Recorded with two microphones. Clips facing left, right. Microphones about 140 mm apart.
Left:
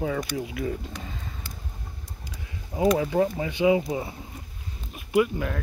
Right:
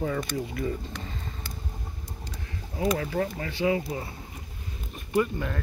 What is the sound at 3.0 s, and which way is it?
Speech, 15° left (ahead or behind).